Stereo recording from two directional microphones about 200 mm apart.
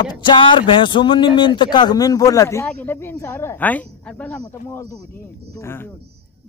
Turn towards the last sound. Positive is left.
turn(degrees=10)  # may be behind; listen again after turning